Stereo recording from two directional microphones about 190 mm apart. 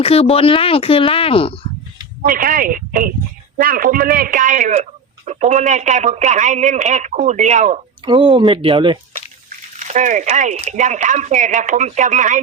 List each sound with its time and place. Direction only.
0.0 s speech: 30° left (ahead or behind)
2.2 s a man's voice: 45° right (ahead or behind)
8.0 s speech: 25° right (ahead or behind)
9.7 s a man's voice: 40° right (ahead or behind)